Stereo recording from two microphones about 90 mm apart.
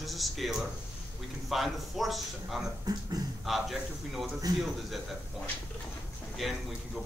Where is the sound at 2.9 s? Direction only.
45° right (ahead or behind).